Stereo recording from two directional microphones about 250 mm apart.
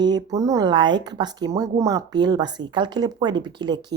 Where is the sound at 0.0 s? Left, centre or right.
Centre.